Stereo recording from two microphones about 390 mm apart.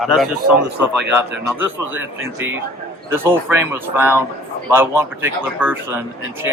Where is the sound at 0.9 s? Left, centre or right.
Right.